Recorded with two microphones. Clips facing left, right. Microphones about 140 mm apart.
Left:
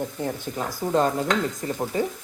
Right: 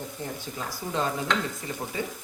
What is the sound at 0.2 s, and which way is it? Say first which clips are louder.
Speech: left 7 dB; 55° left (ahead or behind).